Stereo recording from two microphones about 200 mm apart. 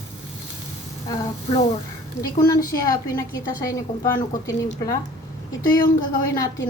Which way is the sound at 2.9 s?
20° left (ahead or behind).